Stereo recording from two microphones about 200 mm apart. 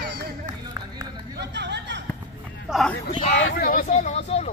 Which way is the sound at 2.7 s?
Centre (ahead or behind).